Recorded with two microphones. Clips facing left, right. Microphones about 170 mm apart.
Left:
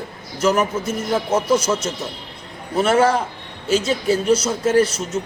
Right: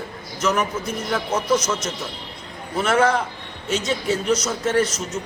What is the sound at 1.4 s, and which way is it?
Speech, 10° left (ahead or behind).